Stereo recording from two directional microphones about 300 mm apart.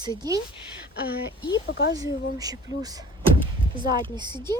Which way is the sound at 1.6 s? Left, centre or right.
Left.